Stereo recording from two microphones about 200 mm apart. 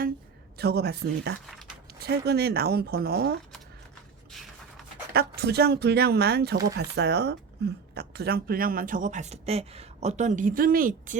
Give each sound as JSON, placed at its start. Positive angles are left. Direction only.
{"t": 0.6, "sound": "speech", "side_deg": -55}
{"t": 5.1, "sound": "speech", "side_deg": -50}